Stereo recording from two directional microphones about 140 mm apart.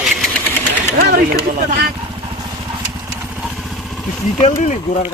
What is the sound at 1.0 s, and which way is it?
Speech, 90° right.